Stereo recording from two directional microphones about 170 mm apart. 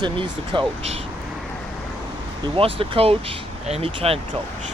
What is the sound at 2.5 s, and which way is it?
Speech, 30° right (ahead or behind).